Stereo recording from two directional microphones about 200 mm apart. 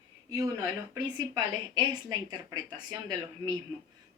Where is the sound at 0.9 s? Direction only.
20° right (ahead or behind).